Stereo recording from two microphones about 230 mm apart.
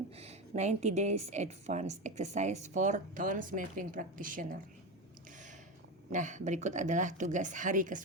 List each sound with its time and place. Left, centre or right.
0.2 s a woman's voice: right
6.1 s a woman's voice: right